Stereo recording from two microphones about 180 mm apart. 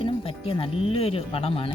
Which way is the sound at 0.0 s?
30° left (ahead or behind).